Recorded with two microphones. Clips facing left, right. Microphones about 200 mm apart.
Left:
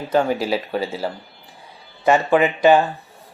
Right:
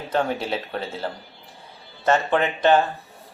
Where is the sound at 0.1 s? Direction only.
5° left (ahead or behind).